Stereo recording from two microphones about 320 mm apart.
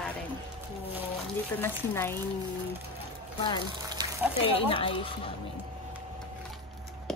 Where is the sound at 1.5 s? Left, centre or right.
Centre.